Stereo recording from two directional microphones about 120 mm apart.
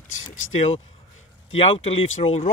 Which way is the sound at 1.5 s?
55° left (ahead or behind).